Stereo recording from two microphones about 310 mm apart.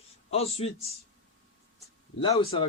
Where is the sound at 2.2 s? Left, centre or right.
Centre.